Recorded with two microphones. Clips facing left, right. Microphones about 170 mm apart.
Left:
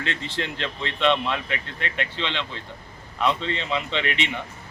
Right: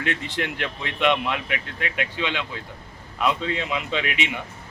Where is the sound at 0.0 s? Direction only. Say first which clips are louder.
Right 2 dB; 15° right (ahead or behind).